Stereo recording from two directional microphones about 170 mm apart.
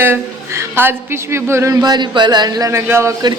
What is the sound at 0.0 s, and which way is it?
A woman's voice, 15° right (ahead or behind).